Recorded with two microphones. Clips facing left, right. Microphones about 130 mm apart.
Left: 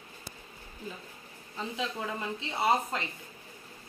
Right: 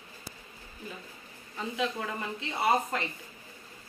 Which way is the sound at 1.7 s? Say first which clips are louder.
Right 3 dB; 25° left (ahead or behind).